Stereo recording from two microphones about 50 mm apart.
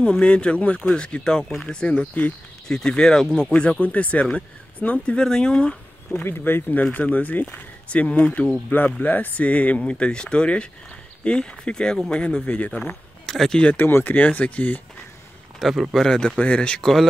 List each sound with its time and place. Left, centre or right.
0.1 s speech: left
3.8 s speech: left
6.2 s speech: left
6.7 s speech: left; by 12.4 s centre
12.4 s speech: left
13.3 s speech: centre
13.7 s speech: left
14.1 s speech: left
15.9 s speech: centre
16.3 s speech: left
16.8 s speech: centre